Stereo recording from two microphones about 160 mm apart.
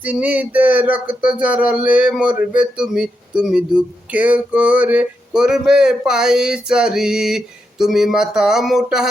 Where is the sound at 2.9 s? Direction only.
5° right (ahead or behind).